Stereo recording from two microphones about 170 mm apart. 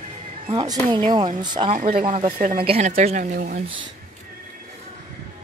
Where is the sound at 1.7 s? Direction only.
50° right (ahead or behind).